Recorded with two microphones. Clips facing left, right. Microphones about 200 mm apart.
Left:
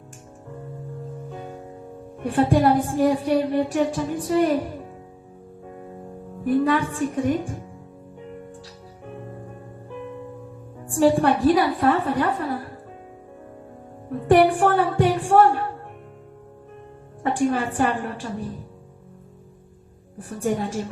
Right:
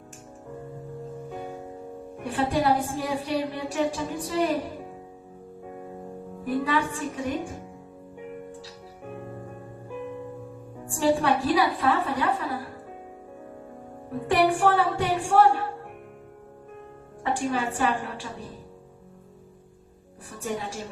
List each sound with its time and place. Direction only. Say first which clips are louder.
1.3 s music: even; 5° right (ahead or behind)
2.2 s a woman's voice: left 6 dB; 50° left (ahead or behind)
5.6 s music: even; centre (ahead or behind)
6.7 s a woman's voice: left 5 dB; 50° left (ahead or behind)
9.0 s music: even; 5° right (ahead or behind)
10.8 s a woman's voice: left 5 dB; 50° left (ahead or behind)
14.3 s a woman's voice: left 5 dB; 50° left (ahead or behind)
17.2 s a woman's voice: left 5 dB; 50° left (ahead or behind)
20.1 s a woman's voice: left 7 dB; 50° left (ahead or behind)